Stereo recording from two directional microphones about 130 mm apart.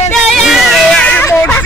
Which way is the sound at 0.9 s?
10° left (ahead or behind).